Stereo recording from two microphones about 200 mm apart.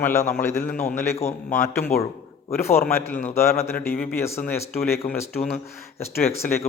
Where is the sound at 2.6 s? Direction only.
10° left (ahead or behind).